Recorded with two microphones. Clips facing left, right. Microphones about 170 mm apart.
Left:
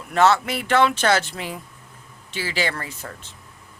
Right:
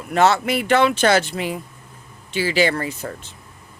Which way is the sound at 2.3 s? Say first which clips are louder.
Right 8 dB; 65° right (ahead or behind).